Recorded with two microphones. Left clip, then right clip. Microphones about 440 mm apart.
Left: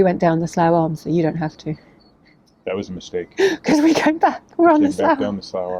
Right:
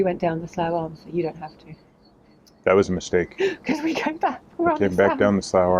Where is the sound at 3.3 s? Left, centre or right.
Left.